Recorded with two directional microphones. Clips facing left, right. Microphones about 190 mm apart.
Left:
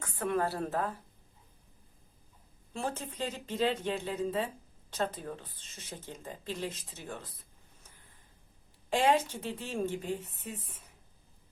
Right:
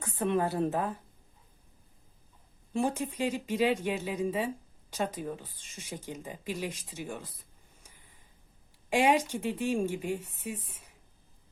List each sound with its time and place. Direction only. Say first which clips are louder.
0.0 s speech: right 2 dB; 20° right (ahead or behind)
2.7 s speech: right 6 dB; 15° right (ahead or behind)
8.9 s speech: right 2 dB; 15° right (ahead or behind)